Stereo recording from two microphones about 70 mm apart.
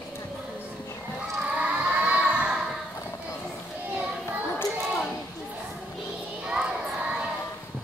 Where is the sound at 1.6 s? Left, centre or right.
Centre.